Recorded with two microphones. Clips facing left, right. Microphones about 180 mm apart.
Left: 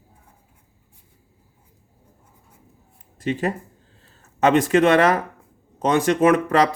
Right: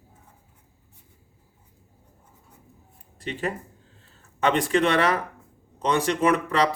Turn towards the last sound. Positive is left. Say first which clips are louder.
# left 5 dB
turn(degrees=50)  # may be behind; listen again after turning